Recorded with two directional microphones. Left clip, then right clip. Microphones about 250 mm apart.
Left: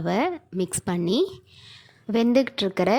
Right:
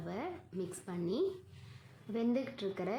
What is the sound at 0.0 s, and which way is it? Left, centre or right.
A woman's voice, left.